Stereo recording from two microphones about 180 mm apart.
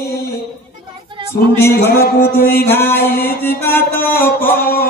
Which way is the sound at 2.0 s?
55° left (ahead or behind).